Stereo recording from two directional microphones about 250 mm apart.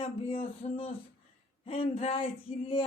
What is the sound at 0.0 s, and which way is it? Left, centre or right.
Female singing, left.